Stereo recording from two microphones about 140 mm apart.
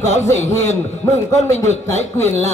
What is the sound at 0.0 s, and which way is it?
A man's voice, 55° left (ahead or behind).